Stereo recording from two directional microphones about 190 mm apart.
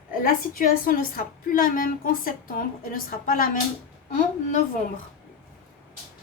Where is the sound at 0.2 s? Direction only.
50° left (ahead or behind).